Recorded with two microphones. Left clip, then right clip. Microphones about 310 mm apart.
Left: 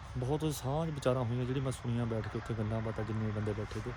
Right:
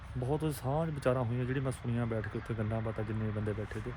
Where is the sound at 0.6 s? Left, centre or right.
Centre.